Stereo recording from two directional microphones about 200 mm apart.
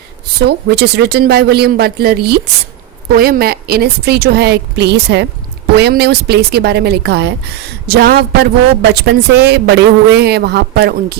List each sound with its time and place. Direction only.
0.4 s a woman's voice: 55° right (ahead or behind)